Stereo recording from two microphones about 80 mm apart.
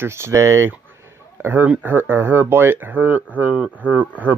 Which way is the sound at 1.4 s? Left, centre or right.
Right.